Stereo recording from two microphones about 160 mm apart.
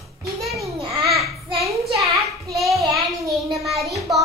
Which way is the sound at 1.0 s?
Centre (ahead or behind).